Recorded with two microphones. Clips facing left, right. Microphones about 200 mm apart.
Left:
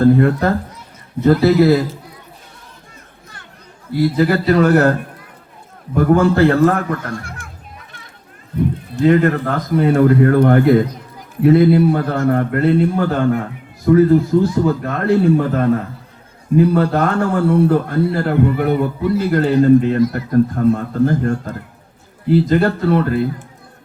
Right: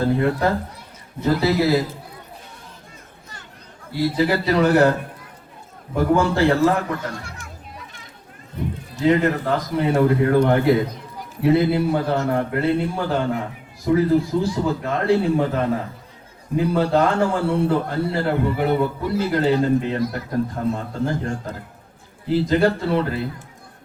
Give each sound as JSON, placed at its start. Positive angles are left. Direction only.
{"t": 0.0, "sound": "a man's voice", "side_deg": 50}
{"t": 3.9, "sound": "a man's voice", "side_deg": 55}
{"t": 6.0, "sound": "a man's voice", "side_deg": 55}
{"t": 9.0, "sound": "a man's voice", "side_deg": 55}